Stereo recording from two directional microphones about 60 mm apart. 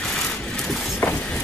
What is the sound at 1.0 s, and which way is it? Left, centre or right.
Vehicle, left.